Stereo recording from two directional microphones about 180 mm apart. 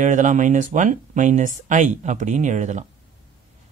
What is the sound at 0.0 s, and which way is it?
Speech, 45° right (ahead or behind).